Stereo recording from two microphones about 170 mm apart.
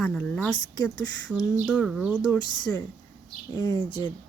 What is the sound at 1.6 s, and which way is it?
Speech, 5° left (ahead or behind).